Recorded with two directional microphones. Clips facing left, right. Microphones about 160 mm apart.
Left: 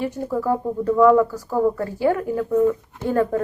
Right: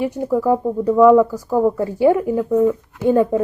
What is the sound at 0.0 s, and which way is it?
Speech, 15° right (ahead or behind).